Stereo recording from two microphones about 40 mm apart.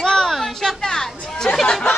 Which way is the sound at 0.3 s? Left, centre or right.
Centre.